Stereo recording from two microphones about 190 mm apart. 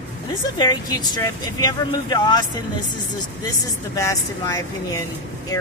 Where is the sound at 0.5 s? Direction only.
20° left (ahead or behind).